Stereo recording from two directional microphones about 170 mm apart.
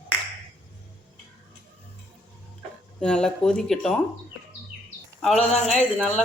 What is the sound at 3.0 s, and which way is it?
Speech, 5° left (ahead or behind).